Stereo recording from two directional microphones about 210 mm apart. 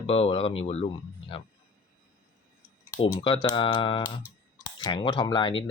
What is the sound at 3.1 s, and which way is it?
Speech, 25° left (ahead or behind).